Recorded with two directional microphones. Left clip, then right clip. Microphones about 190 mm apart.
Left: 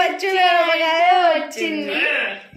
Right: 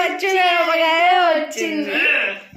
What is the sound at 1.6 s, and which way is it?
Speech, 15° right (ahead or behind).